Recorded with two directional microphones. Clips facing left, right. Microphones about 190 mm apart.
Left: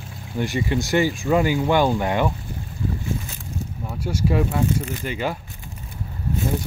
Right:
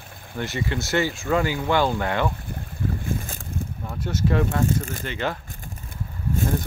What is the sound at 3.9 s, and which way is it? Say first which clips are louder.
Speech: left 1 dB; 10° left (ahead or behind).